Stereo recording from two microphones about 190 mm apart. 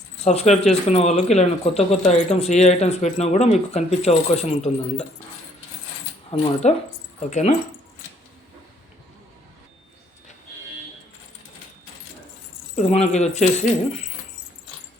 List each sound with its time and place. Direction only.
0.3 s speech: 35° left (ahead or behind)
6.4 s speech: 35° left (ahead or behind)
12.7 s speech: 35° left (ahead or behind)